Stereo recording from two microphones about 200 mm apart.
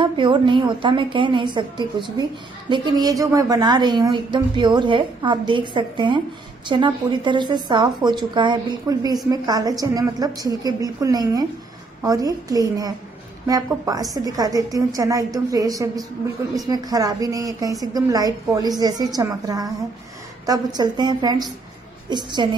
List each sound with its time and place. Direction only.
0.0 s a woman's voice: 25° right (ahead or behind)